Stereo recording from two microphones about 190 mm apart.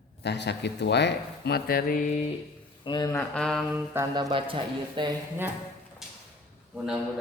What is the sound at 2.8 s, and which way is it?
Speech, 20° left (ahead or behind).